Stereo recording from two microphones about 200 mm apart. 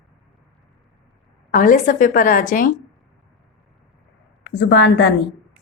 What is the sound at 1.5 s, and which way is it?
A woman's voice, 40° left (ahead or behind).